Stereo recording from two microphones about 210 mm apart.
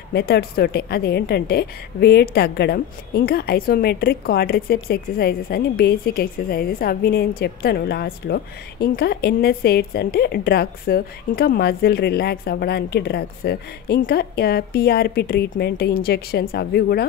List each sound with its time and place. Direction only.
0.1 s a woman's voice: 50° left (ahead or behind)